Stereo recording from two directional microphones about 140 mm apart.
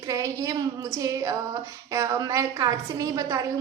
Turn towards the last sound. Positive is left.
turn(degrees=-25)  # may be behind; listen again after turning